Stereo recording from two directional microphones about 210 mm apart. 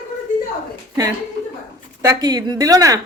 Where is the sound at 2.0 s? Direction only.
15° right (ahead or behind).